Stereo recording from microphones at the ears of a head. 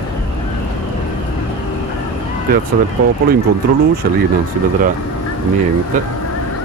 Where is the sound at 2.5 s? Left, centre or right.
Right.